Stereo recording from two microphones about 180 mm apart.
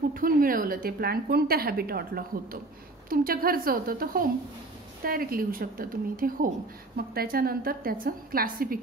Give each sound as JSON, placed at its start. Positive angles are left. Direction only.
{"t": 0.1, "sound": "a woman's voice", "side_deg": -50}